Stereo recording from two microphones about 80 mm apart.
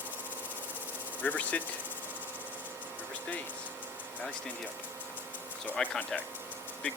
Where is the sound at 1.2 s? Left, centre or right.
Centre.